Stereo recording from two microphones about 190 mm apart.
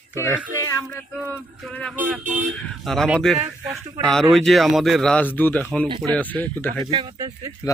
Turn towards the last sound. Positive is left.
turn(degrees=-20)  # may be behind; listen again after turning